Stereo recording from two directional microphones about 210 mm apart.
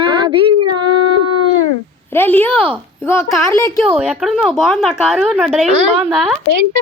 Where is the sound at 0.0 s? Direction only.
25° right (ahead or behind).